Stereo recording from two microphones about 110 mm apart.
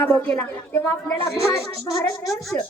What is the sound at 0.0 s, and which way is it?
Speech, 15° left (ahead or behind).